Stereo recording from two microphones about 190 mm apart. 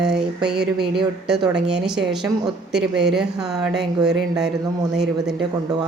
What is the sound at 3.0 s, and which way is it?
Speech, 5° right (ahead or behind).